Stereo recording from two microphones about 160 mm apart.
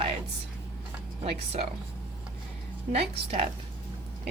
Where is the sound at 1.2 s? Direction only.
40° right (ahead or behind).